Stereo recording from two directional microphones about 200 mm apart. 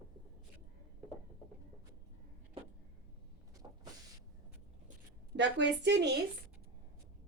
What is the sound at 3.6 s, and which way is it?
Vehicle, 15° right (ahead or behind).